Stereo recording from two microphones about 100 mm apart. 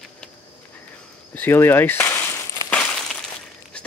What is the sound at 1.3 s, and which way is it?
Speech, 20° left (ahead or behind).